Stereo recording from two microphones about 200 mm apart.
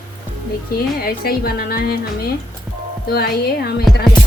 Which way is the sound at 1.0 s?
50° left (ahead or behind).